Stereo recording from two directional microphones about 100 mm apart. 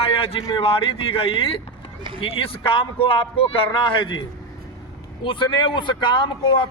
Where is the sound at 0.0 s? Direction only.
80° left.